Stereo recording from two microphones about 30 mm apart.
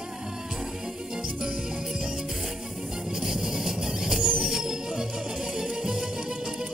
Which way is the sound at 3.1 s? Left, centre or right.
Centre.